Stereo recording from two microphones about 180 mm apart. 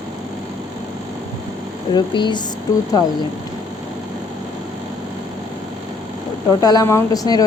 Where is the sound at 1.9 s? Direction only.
25° left (ahead or behind).